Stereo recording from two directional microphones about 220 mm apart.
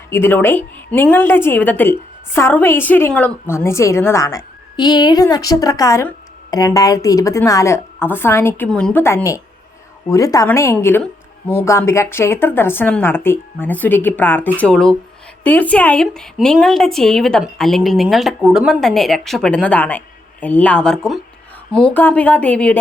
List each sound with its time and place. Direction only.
0.1 s a woman's voice: 10° left (ahead or behind)